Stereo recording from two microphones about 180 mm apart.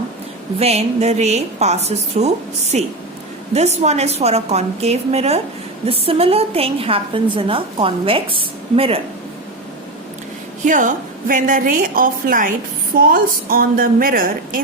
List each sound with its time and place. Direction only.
0.6 s a woman's voice: 35° right (ahead or behind)
10.7 s a woman's voice: 45° right (ahead or behind)